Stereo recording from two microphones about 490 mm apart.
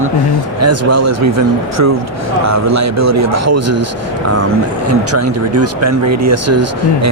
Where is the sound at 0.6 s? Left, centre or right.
Right.